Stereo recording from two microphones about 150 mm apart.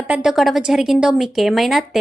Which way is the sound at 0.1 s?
5° right (ahead or behind).